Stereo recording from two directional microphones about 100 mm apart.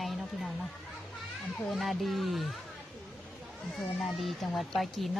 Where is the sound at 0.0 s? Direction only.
Centre (ahead or behind).